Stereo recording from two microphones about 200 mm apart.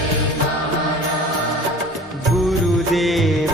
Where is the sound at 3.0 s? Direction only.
Centre (ahead or behind).